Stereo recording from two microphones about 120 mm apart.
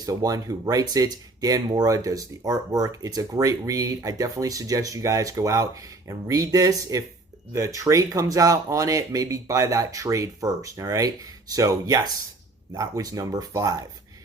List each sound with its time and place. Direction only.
0.0 s speech: 30° right (ahead or behind)